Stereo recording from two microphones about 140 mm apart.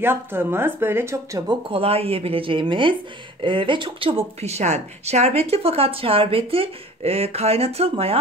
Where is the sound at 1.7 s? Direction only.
45° right (ahead or behind).